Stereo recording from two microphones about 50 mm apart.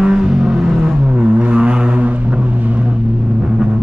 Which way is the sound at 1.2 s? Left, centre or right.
Right.